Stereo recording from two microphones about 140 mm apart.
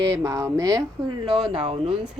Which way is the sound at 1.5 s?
40° right (ahead or behind).